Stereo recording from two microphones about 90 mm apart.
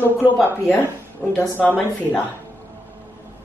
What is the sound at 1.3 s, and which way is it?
Speech, 20° left (ahead or behind).